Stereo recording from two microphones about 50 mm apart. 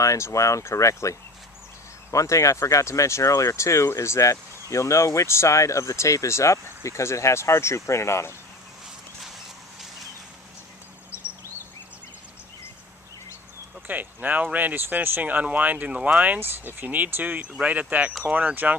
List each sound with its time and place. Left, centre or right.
0.0 s speech: left
2.1 s speech: left
13.8 s speech: right
16.4 s speech: right